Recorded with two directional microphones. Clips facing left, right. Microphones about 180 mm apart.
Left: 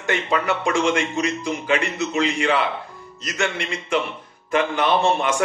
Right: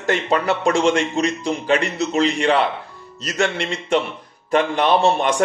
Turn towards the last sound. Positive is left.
turn(degrees=-35)  # may be behind; listen again after turning